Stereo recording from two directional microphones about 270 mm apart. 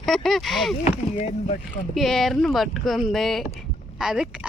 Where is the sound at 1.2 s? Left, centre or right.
Left.